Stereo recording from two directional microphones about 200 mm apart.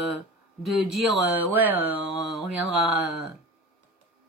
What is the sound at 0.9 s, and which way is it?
Speech, 10° right (ahead or behind).